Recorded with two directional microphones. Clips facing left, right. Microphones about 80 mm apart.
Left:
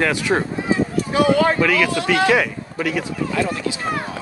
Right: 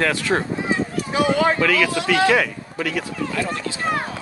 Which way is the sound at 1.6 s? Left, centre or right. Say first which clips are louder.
Left 1 dB; centre.